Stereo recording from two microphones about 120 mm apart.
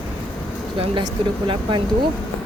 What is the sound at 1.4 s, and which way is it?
Speech, 45° right (ahead or behind).